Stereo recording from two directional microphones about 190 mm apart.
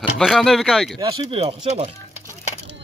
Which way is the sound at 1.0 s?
20° right (ahead or behind).